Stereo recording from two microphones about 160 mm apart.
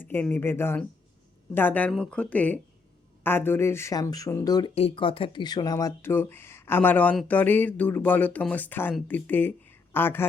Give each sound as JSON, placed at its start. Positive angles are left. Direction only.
{"t": 0.0, "sound": "speech", "side_deg": 10}
{"t": 4.7, "sound": "speech", "side_deg": 35}